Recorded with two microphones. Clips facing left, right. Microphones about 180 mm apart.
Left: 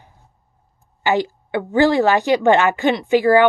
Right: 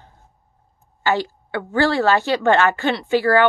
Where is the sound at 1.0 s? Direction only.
15° left (ahead or behind).